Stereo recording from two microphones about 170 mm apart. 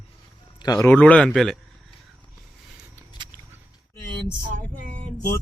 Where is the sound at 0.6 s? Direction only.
20° left (ahead or behind).